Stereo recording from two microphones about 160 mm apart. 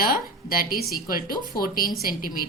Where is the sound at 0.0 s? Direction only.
65° left (ahead or behind).